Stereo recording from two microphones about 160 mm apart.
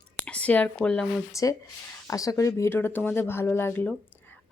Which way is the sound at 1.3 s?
20° left (ahead or behind).